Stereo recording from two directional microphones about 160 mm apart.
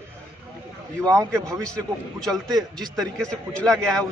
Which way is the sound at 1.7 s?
5° left (ahead or behind).